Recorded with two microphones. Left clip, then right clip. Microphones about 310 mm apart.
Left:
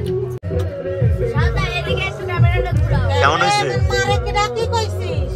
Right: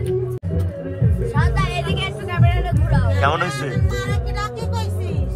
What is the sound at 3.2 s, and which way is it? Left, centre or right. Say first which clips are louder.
Speech: left 6 dB; centre.